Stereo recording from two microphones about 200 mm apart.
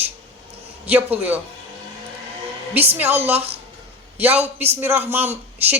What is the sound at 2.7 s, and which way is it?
Speech, 10° right (ahead or behind).